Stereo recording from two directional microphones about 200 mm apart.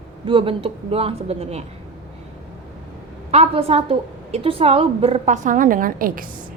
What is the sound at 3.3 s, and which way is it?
A woman's voice, 30° right (ahead or behind).